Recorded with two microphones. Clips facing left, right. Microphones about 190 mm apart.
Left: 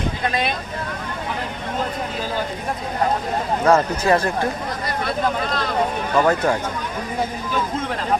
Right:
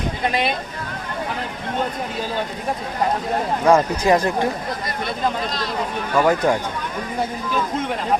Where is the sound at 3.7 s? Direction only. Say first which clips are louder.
Right 1 dB; 15° right (ahead or behind).